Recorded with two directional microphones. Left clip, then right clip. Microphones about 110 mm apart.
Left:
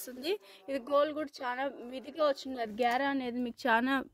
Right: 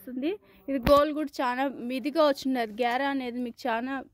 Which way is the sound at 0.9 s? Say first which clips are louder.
Right 7 dB; 30° right (ahead or behind).